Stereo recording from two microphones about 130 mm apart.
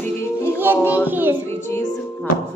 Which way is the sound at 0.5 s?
15° right (ahead or behind).